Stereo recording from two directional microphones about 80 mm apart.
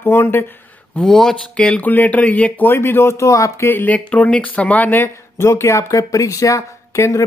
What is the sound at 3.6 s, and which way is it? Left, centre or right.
Speech, left.